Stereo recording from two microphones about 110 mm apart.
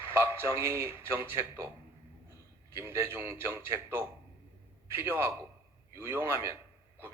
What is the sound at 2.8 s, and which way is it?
Speech, 25° right (ahead or behind).